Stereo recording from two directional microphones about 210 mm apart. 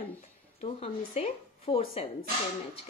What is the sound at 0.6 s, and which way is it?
Speech, 30° left (ahead or behind).